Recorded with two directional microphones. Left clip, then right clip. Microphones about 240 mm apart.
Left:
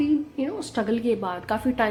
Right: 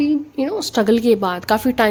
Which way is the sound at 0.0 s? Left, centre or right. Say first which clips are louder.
Right 5 dB; right.